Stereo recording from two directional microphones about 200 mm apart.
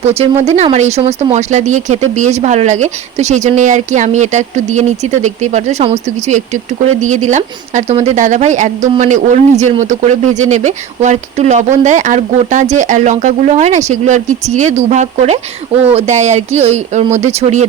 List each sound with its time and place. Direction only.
0.0 s speech: 30° right (ahead or behind)